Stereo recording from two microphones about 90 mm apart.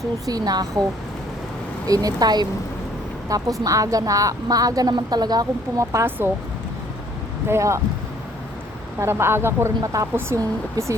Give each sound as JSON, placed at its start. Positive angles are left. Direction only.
{"t": 0.3, "sound": "speech", "side_deg": -45}
{"t": 1.9, "sound": "a woman's voice", "side_deg": -45}
{"t": 6.1, "sound": "speech", "side_deg": -25}
{"t": 7.4, "sound": "a woman's voice", "side_deg": -30}
{"t": 9.0, "sound": "a woman's voice", "side_deg": -30}